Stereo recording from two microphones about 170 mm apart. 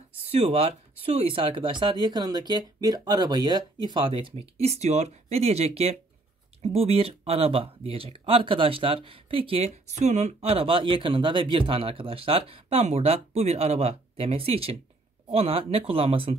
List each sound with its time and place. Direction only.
0.3 s speech: 35° right (ahead or behind)